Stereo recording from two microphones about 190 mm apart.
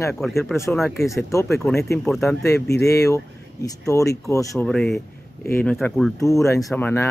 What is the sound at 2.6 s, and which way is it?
Speech, 55° left (ahead or behind).